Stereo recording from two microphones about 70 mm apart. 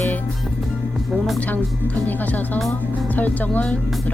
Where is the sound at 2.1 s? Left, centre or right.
Left.